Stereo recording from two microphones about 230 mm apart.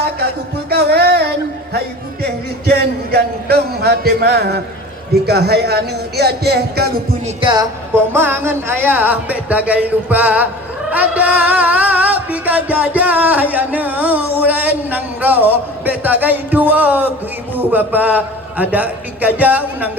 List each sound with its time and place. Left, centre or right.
0.7 s music: right
2.2 s a sound: right
5.2 s speech: right
7.4 s music: centre